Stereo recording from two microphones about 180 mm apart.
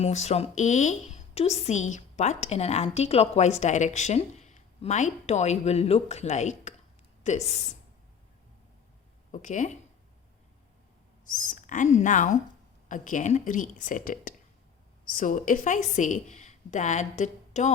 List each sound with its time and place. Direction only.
0.0 s speech: 35° left (ahead or behind)
9.3 s speech: 45° left (ahead or behind)
11.3 s a woman's voice: 45° left (ahead or behind)